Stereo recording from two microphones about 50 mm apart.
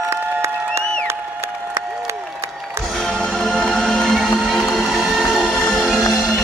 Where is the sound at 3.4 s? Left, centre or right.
Centre.